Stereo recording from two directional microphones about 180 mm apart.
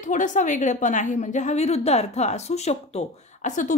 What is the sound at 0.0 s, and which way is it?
A woman's voice, 45° left (ahead or behind).